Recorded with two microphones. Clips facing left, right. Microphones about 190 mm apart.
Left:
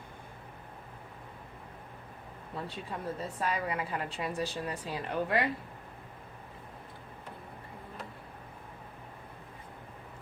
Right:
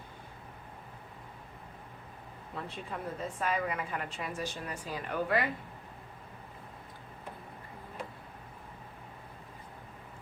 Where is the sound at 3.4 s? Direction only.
35° left (ahead or behind).